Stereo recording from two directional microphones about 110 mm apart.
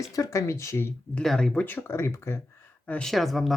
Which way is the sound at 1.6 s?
20° left (ahead or behind).